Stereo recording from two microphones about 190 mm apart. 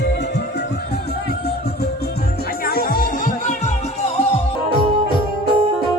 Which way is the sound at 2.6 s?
50° left (ahead or behind).